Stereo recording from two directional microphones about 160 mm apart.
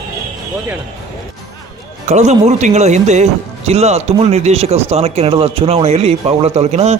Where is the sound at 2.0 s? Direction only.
45° right (ahead or behind).